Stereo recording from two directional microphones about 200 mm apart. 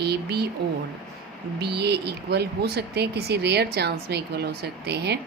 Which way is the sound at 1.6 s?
55° right (ahead or behind).